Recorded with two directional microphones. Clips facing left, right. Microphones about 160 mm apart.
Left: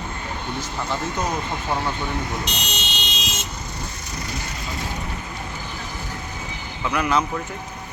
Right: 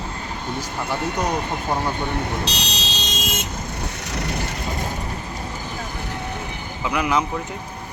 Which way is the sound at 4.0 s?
70° right (ahead or behind).